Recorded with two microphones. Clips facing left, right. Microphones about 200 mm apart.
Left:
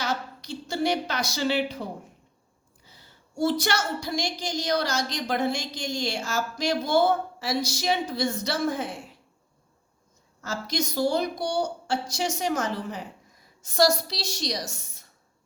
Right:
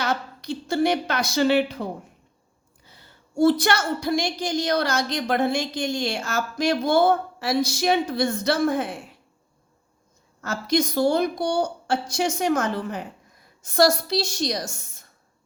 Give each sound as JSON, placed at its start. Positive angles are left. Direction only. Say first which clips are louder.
{"t": 0.0, "sound": "a sound", "louder": "right 3 dB", "side_deg": -55}
{"t": 2.8, "sound": "a woman's voice", "louder": "right 2 dB", "side_deg": -60}
{"t": 10.4, "sound": "a woman's voice", "louder": "right 7 dB", "side_deg": -55}